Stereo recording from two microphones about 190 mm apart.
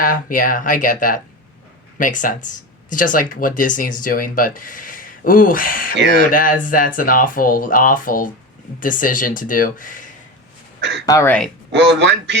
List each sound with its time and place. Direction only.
0.0 s speech: 45° left (ahead or behind)
11.0 s speech: 15° left (ahead or behind)
11.7 s speech: 70° right (ahead or behind)